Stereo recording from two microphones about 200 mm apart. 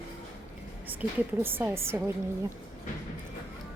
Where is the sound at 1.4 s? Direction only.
10° right (ahead or behind).